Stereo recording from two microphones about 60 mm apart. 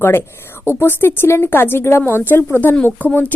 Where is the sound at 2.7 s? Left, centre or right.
Centre.